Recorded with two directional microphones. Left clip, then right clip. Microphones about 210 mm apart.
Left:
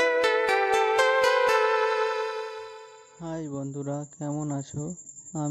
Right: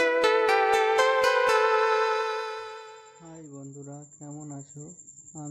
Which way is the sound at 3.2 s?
35° left (ahead or behind).